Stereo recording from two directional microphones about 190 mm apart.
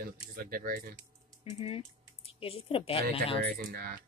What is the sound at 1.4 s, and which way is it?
Speech, 30° left (ahead or behind).